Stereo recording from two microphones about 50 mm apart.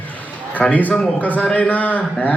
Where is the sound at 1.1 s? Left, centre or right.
Left.